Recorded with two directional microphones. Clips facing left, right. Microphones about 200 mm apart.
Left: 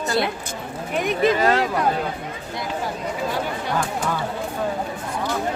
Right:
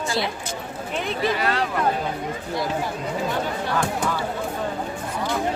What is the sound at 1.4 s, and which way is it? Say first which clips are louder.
Speech: left 5 dB; 40° left (ahead or behind).